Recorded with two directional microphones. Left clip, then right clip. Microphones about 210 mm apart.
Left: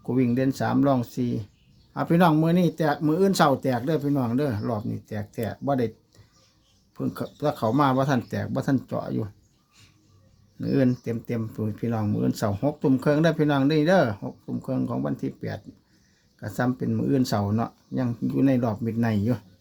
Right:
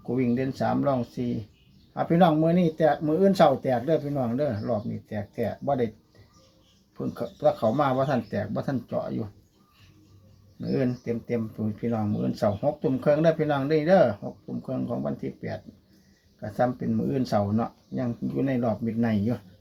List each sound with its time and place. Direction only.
0.2 s speech: 55° left (ahead or behind)
6.9 s speech: 45° left (ahead or behind)
10.6 s speech: 50° left (ahead or behind)
17.1 s speech: 55° left (ahead or behind)